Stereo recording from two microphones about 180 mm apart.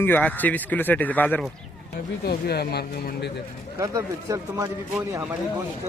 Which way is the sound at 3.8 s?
20° right (ahead or behind).